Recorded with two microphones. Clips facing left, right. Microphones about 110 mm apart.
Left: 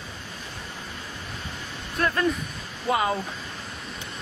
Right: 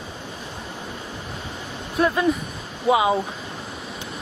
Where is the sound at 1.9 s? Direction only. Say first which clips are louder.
Right 4 dB; 10° right (ahead or behind).